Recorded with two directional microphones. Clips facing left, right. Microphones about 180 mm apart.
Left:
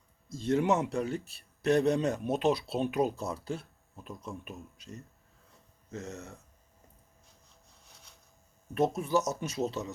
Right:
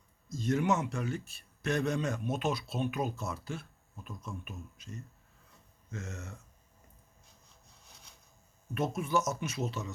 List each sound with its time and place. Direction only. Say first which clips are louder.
0.3 s a man's voice: left 2 dB; 30° left (ahead or behind)
8.7 s a man's voice: left 3 dB; 35° left (ahead or behind)